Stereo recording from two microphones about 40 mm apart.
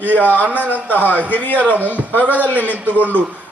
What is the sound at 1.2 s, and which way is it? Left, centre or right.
A man's voice, left.